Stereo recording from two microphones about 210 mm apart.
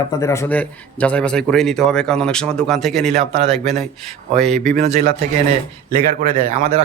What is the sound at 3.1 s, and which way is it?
Speech, 30° right (ahead or behind).